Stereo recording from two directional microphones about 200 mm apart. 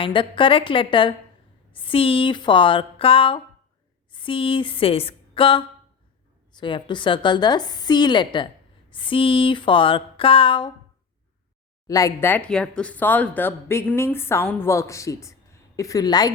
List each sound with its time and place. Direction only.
0.0 s a woman's voice: 25° left (ahead or behind)
11.9 s speech: 15° left (ahead or behind)